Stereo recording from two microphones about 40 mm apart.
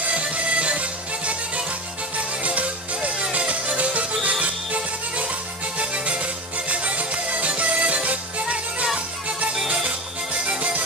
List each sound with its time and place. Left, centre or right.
0.1 s music: right
9.8 s music: right